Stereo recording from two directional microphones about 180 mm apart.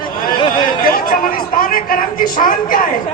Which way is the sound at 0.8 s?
55° left (ahead or behind).